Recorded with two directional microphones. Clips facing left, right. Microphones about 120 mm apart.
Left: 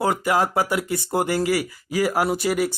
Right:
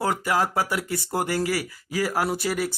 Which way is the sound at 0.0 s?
20° left (ahead or behind).